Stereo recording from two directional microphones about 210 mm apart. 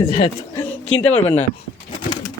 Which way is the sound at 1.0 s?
5° left (ahead or behind).